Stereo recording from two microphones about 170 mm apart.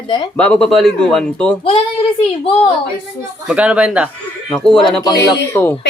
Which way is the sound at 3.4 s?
5° right (ahead or behind).